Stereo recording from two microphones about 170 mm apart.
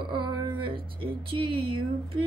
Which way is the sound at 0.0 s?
30° right (ahead or behind).